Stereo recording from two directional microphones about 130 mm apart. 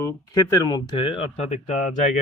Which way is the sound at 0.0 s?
30° left (ahead or behind).